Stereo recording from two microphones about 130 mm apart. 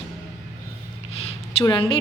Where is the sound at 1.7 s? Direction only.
40° left (ahead or behind).